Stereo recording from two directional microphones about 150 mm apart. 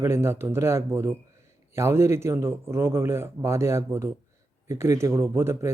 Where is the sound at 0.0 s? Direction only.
15° right (ahead or behind).